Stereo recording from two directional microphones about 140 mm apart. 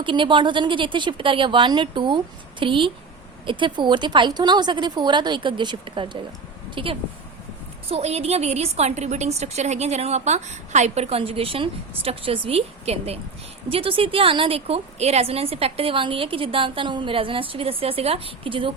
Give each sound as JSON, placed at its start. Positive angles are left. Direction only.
{"t": 0.0, "sound": "a woman's voice", "side_deg": -35}
{"t": 7.9, "sound": "a woman's voice", "side_deg": -50}